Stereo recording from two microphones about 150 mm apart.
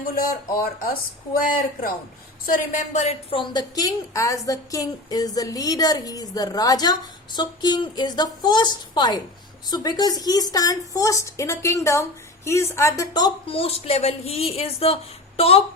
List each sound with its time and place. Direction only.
0.5 s a woman's voice: 75° left (ahead or behind)
2.5 s a woman's voice: 55° left (ahead or behind); by 13.6 s 25° left (ahead or behind)
13.6 s speech: 40° left (ahead or behind)